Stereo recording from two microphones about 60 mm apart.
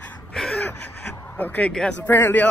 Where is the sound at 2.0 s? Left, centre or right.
Left.